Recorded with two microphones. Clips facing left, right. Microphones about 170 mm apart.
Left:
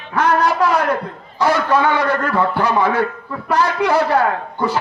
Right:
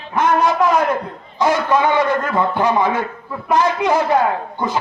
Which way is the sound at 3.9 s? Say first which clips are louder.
Even; 15° right (ahead or behind).